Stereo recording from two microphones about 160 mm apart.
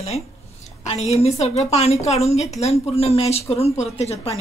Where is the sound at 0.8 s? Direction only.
40° left (ahead or behind).